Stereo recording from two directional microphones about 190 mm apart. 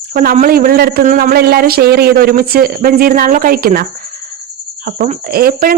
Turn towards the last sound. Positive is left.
turn(degrees=-50)  # may be behind; listen again after turning